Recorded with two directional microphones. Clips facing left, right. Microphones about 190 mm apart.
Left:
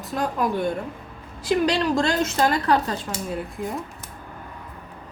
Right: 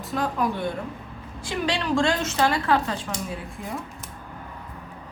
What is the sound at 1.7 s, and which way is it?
A woman's voice, 40° left (ahead or behind).